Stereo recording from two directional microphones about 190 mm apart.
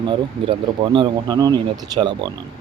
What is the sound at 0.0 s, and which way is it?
Speech, 25° right (ahead or behind).